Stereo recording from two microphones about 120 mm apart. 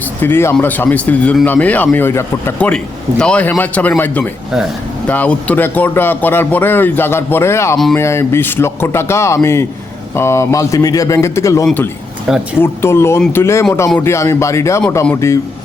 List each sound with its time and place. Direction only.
0.2 s speech: 20° left (ahead or behind)